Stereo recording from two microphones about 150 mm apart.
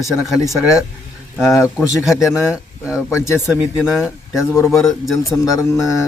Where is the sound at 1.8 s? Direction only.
20° left (ahead or behind).